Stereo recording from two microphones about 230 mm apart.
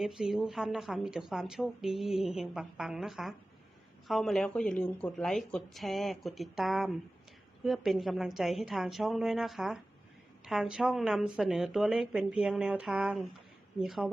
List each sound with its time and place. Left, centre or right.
0.0 s a woman's voice: centre